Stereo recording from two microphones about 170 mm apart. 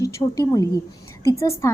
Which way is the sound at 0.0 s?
20° left (ahead or behind).